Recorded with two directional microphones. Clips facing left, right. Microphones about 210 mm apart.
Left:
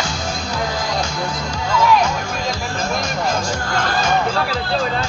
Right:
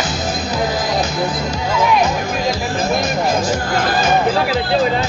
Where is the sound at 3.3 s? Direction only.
5° right (ahead or behind).